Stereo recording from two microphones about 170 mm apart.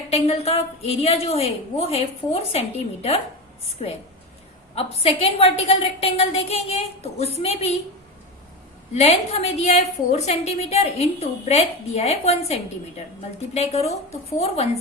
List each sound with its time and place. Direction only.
0.1 s a woman's voice: 35° left (ahead or behind)
4.7 s a woman's voice: 35° left (ahead or behind)
8.9 s a woman's voice: 35° left (ahead or behind)
13.5 s a woman's voice: 40° left (ahead or behind)